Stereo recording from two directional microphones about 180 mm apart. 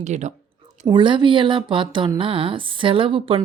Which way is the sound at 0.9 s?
25° right (ahead or behind).